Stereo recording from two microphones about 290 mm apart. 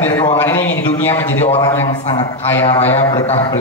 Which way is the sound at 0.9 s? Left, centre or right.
Centre.